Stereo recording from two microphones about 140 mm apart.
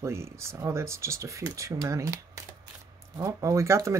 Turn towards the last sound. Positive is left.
turn(degrees=-20)  # may be behind; listen again after turning